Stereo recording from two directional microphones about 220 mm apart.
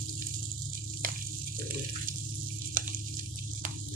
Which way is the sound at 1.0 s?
40° right (ahead or behind).